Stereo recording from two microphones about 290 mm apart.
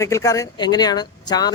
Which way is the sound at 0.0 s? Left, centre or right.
Centre.